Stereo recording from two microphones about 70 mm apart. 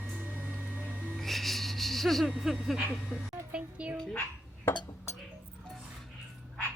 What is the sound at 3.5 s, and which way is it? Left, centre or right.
Music, centre.